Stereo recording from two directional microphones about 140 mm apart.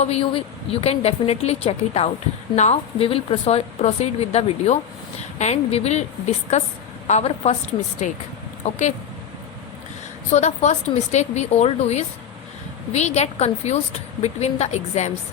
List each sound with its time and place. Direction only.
0.0 s a woman's voice: 45° left (ahead or behind)
10.3 s a woman's voice: 55° left (ahead or behind)